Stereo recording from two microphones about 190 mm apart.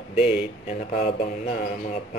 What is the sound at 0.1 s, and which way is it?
Speech, 5° right (ahead or behind).